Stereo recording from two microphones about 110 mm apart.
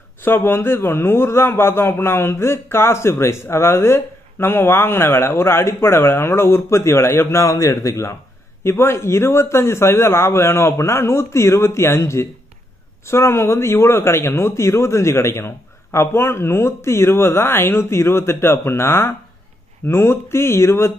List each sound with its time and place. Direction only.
0.2 s a man's voice: 20° left (ahead or behind)